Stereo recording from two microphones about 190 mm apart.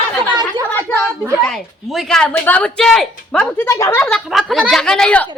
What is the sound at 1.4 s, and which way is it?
A woman's voice, centre (ahead or behind).